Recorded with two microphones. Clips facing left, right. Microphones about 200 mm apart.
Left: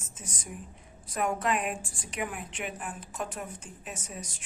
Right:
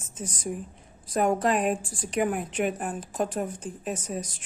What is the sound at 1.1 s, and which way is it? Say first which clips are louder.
A woman's voice: right 6 dB; 35° right (ahead or behind).